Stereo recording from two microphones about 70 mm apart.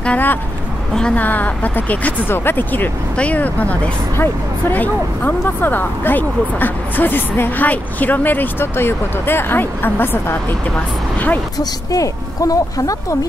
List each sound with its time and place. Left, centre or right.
0.0 s speech: left
0.9 s a woman's voice: centre
1.2 s speech: left
11.5 s speech: left